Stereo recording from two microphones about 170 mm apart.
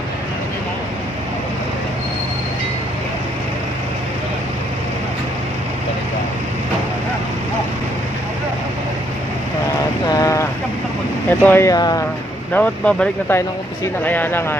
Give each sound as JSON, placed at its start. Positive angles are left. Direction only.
{"t": 10.0, "sound": "a sound", "side_deg": 20}
{"t": 11.2, "sound": "speech", "side_deg": 10}
{"t": 12.5, "sound": "speech", "side_deg": 10}